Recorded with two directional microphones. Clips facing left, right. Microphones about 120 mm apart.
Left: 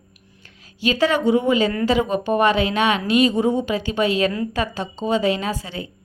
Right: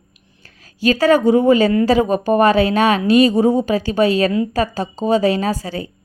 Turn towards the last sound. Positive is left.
turn(degrees=-35)  # may be behind; listen again after turning